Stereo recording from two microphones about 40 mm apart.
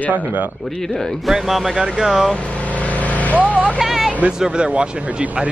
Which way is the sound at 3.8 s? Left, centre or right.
Centre.